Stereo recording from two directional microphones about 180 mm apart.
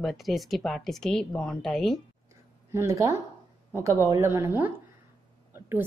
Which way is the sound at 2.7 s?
15° right (ahead or behind).